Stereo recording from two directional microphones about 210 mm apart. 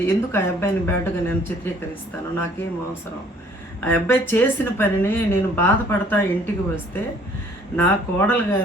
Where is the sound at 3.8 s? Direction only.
10° left (ahead or behind).